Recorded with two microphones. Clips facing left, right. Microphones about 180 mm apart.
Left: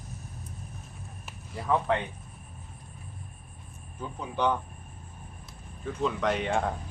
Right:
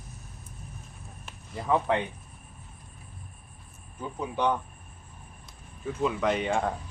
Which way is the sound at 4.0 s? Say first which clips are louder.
Right 1 dB; 5° right (ahead or behind).